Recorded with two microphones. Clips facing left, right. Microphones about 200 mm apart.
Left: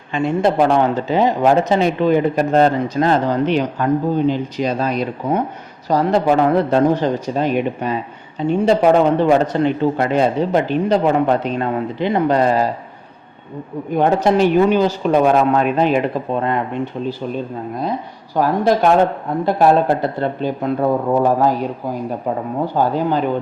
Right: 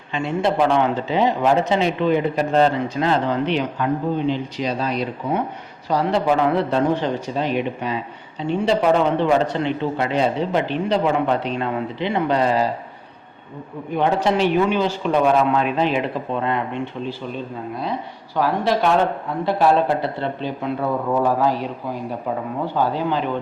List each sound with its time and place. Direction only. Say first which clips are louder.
0.1 s speech: left 4 dB; 45° left (ahead or behind)
13.9 s speech: left 4 dB; 45° left (ahead or behind)
18.3 s speech: left 4 dB; 45° left (ahead or behind)